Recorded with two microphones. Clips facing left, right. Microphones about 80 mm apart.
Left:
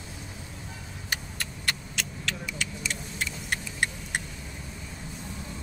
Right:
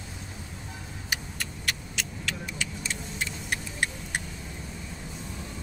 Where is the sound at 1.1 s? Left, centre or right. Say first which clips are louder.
Even; centre.